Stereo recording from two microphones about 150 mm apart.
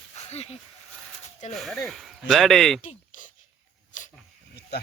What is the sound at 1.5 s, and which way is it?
Speech, centre (ahead or behind).